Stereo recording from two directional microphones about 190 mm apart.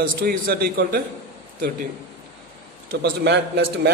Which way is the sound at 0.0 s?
55° right (ahead or behind).